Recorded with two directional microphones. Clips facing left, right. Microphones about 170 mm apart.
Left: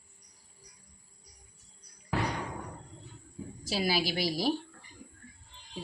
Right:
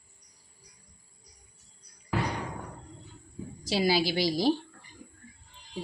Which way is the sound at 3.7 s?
30° right (ahead or behind).